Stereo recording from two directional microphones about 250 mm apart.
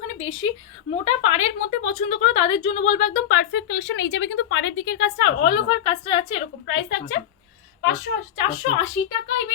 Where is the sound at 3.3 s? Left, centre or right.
Left.